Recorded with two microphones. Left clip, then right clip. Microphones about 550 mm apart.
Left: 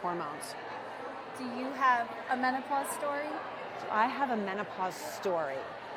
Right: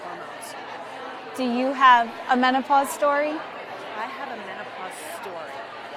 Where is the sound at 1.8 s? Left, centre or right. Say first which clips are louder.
Right 12 dB; right.